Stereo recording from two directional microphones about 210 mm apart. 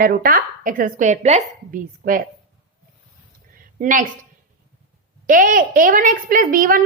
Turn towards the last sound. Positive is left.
turn(degrees=-40)  # may be behind; listen again after turning